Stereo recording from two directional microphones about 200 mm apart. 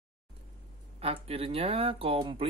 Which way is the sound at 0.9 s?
30° right (ahead or behind).